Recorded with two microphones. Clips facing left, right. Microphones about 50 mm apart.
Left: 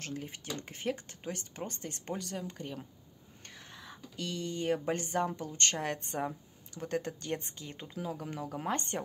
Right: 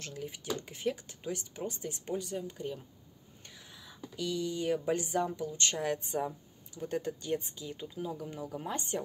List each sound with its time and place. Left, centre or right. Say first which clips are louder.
0.0 s speech: even; left
6.7 s speech: even; left